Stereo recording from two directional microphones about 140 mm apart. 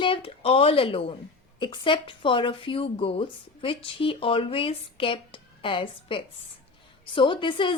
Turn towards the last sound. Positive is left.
turn(degrees=35)  # may be behind; listen again after turning